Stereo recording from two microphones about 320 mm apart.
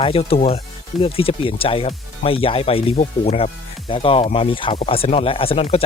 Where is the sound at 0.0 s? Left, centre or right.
Centre.